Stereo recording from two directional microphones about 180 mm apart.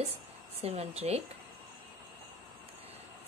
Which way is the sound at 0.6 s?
35° right (ahead or behind).